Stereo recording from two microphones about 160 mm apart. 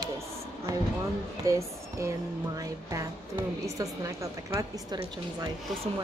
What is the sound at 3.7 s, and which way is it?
A woman's voice, 20° right (ahead or behind).